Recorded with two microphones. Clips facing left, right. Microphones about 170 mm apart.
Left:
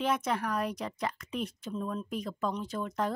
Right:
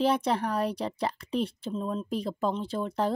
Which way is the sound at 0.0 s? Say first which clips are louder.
Right 5 dB; 30° right (ahead or behind).